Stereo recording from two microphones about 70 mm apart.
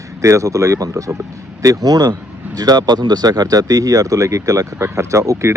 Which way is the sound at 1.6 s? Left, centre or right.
Right.